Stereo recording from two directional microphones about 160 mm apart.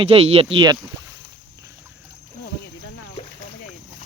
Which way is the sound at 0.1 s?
40° right (ahead or behind).